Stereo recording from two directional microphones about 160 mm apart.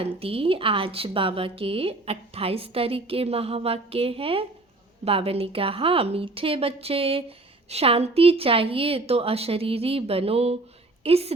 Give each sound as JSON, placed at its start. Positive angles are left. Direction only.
{"t": 0.2, "sound": "a woman's voice", "side_deg": -35}